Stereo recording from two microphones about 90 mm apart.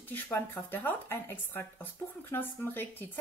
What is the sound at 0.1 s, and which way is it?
A woman's voice, 20° left (ahead or behind).